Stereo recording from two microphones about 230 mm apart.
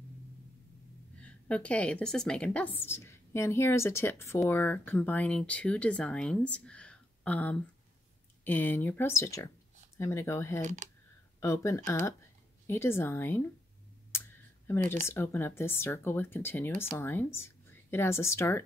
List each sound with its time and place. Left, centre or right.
1.2 s a woman's voice: centre
10.6 s speech: right
11.3 s speech: centre
14.7 s speech: centre